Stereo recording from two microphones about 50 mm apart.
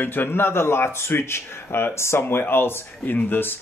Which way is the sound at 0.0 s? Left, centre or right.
Left.